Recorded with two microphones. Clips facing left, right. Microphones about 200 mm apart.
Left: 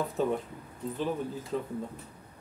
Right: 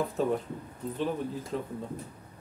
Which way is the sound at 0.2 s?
Centre (ahead or behind).